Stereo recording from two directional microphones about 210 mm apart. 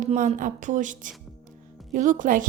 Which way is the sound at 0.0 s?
35° right (ahead or behind).